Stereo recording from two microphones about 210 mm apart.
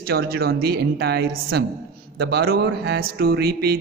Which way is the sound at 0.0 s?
45° right (ahead or behind).